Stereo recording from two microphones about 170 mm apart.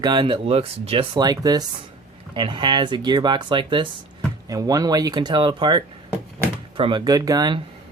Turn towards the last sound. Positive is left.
turn(degrees=-25)  # may be behind; listen again after turning